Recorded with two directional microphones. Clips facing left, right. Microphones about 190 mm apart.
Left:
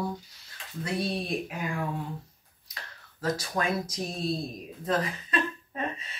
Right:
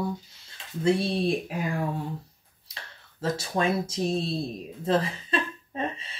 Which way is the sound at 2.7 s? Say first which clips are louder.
Even; 30° right (ahead or behind).